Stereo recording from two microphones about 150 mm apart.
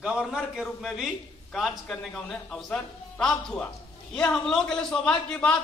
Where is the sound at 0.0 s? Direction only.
5° right (ahead or behind).